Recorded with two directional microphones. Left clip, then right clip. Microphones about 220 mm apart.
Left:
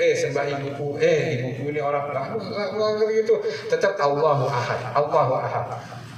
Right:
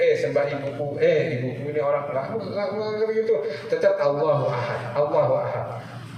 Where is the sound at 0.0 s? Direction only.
50° left (ahead or behind).